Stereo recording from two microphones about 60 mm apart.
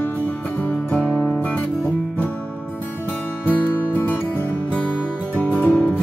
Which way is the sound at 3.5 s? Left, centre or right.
Left.